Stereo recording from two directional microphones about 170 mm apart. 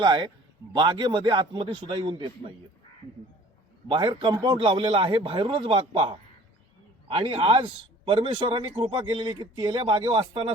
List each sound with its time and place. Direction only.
0.0 s a man's voice: 25° right (ahead or behind)
3.8 s a man's voice: 30° right (ahead or behind)
7.2 s a man's voice: 30° right (ahead or behind)